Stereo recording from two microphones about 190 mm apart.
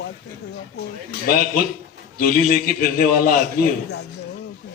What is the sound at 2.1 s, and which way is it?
A man's voice, 50° left (ahead or behind).